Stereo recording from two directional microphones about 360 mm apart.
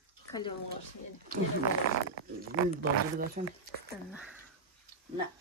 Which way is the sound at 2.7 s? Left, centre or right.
Right.